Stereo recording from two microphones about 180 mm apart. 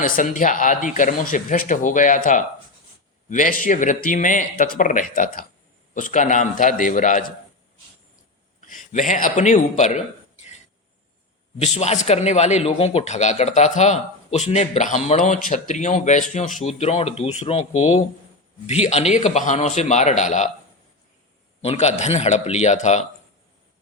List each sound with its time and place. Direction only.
0.0 s speech: 45° left (ahead or behind)
8.9 s speech: 45° left (ahead or behind)
11.6 s speech: 40° left (ahead or behind)
21.6 s speech: 35° left (ahead or behind)